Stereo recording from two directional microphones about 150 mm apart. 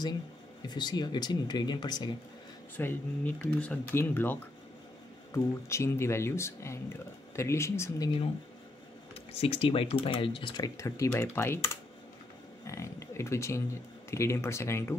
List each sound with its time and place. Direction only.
0.7 s speech: 30° left (ahead or behind)
2.8 s speech: 15° left (ahead or behind)
9.1 s speech: 40° left (ahead or behind); by 15.0 s 15° left (ahead or behind)